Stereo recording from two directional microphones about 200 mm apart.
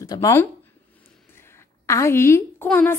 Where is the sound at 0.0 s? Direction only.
15° left (ahead or behind).